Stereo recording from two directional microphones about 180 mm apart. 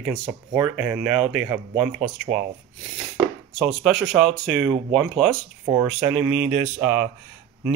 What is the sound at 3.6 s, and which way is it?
Speech, centre (ahead or behind).